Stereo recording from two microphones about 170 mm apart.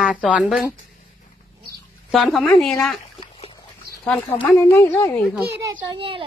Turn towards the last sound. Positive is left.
turn(degrees=-30)  # may be behind; listen again after turning